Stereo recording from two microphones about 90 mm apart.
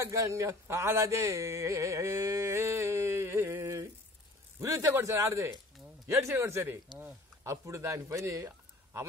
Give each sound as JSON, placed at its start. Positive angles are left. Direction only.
{"t": 0.0, "sound": "a man's voice", "side_deg": -35}